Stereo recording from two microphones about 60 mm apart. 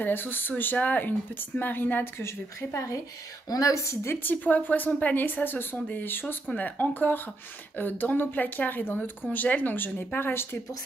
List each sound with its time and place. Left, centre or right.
0.0 s speech: left
2.2 s a woman's voice: left
3.4 s a woman's voice: left
4.1 s speech: left